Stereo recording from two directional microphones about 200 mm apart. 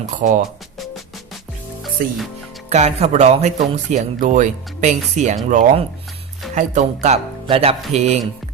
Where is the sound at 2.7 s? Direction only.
35° right (ahead or behind).